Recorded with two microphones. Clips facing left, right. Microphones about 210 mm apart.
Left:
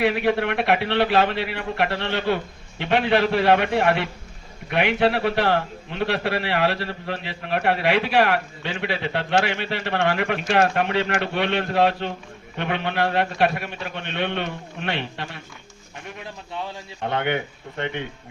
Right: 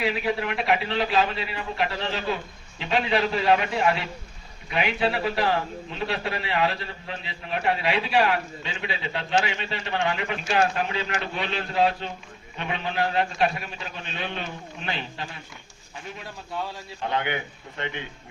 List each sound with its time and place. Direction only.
0.0 s a man's voice: 65° left (ahead or behind)
17.0 s a man's voice: 55° left (ahead or behind)